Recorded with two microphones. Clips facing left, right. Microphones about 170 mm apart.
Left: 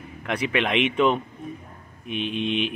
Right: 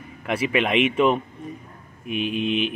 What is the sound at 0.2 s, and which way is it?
A man's voice, 5° right (ahead or behind).